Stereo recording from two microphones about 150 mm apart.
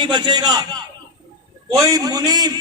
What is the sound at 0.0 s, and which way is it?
A man's voice, 30° right (ahead or behind).